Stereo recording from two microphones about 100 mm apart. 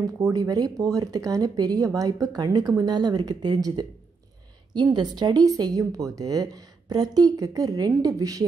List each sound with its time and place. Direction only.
0.0 s speech: 35° right (ahead or behind)